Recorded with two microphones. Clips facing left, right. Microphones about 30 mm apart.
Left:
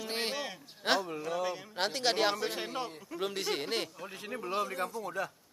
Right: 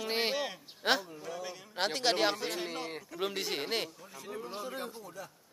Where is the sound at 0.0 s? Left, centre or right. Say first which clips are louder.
Right 3 dB; centre.